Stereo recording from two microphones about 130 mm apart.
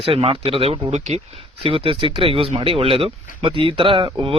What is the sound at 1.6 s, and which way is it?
Speech, 45° right (ahead or behind).